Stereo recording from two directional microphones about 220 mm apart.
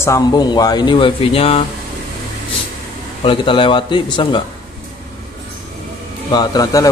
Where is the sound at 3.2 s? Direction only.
25° left (ahead or behind).